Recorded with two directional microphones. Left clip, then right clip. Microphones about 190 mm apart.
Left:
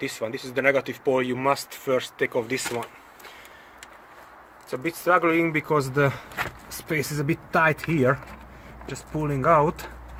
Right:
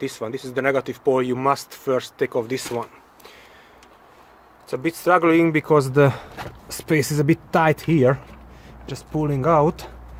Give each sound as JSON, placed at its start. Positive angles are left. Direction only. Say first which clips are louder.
{"t": 0.0, "sound": "speech", "louder": "right 2 dB", "side_deg": -35}
{"t": 4.7, "sound": "speech", "louder": "right 3 dB", "side_deg": -55}
{"t": 9.1, "sound": "speech", "louder": "right 4 dB", "side_deg": -65}
{"t": 9.4, "sound": "speech", "louder": "right 1 dB", "side_deg": -45}